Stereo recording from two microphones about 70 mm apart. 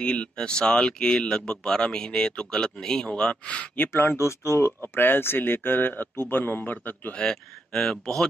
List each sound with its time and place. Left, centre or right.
0.0 s speech: centre; by 4.7 s left
4.9 s speech: left
7.2 s speech: centre